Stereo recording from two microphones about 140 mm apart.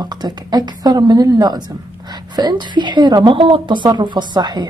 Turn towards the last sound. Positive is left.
turn(degrees=-30)  # may be behind; listen again after turning